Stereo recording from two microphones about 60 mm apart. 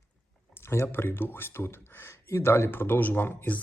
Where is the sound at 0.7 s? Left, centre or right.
Left.